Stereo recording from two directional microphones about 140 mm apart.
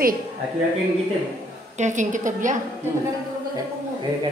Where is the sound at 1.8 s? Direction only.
60° right (ahead or behind).